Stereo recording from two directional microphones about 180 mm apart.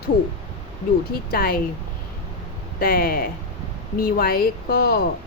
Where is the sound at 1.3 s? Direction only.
55° left (ahead or behind).